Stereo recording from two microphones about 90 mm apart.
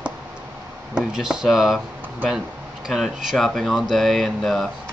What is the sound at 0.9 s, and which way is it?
Speech, 10° right (ahead or behind).